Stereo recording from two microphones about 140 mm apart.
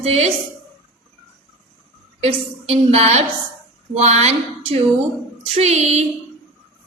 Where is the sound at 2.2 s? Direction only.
45° right (ahead or behind).